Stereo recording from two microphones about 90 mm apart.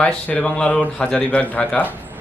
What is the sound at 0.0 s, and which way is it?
A man's voice, 15° left (ahead or behind).